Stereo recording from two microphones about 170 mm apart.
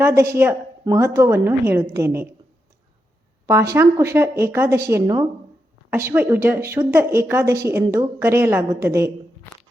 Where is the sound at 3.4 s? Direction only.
15° right (ahead or behind).